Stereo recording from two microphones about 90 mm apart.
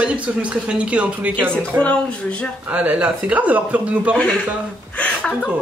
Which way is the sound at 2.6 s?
15° right (ahead or behind).